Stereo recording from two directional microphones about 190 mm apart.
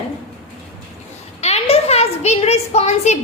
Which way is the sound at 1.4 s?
35° left (ahead or behind).